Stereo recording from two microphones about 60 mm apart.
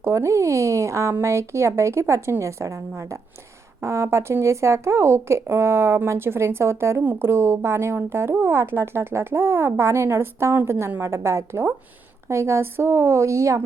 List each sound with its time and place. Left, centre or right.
0.0 s a woman's voice: right